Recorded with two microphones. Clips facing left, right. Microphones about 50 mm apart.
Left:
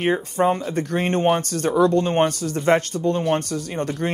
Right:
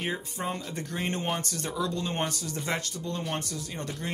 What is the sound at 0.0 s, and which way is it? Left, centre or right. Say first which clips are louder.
Speech: left 13 dB; left.